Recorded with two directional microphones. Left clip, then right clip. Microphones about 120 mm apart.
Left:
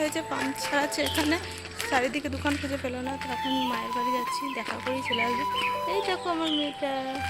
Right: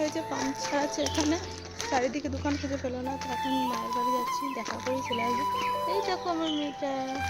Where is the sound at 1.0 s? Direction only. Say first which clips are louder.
Left 2 dB; 15° left (ahead or behind).